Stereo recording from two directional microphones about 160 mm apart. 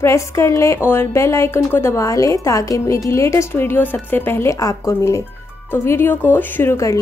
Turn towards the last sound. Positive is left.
turn(degrees=15)  # may be behind; listen again after turning